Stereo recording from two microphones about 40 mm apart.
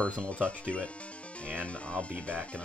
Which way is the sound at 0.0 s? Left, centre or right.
Left.